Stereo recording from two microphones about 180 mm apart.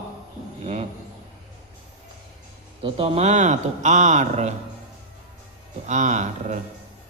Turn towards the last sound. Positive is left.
turn(degrees=-40)  # may be behind; listen again after turning